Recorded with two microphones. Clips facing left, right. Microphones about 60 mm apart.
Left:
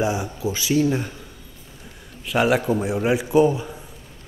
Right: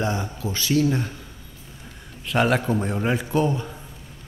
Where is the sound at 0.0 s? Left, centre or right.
Centre.